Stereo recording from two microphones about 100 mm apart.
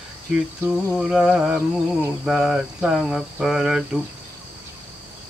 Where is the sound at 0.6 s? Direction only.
10° right (ahead or behind).